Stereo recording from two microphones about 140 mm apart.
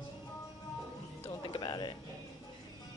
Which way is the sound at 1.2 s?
35° left (ahead or behind).